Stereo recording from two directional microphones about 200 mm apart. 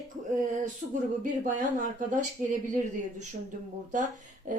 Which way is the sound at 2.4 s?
40° right (ahead or behind).